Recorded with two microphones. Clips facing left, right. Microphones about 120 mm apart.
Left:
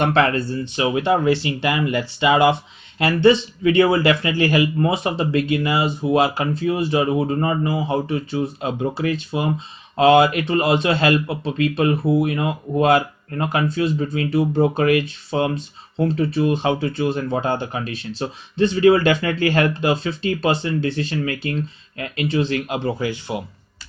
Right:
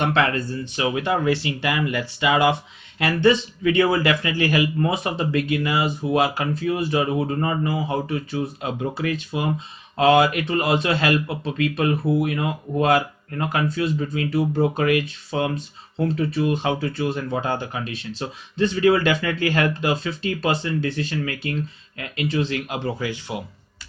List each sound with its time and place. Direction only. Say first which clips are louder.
0.0 s speech: left 3 dB; 40° left (ahead or behind)